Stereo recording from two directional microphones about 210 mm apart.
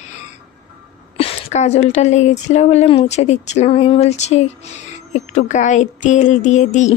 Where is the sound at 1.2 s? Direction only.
30° left (ahead or behind).